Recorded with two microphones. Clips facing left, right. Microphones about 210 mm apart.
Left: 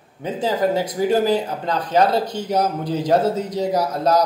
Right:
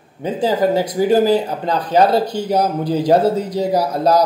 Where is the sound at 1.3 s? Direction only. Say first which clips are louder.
Right 4 dB; 35° right (ahead or behind).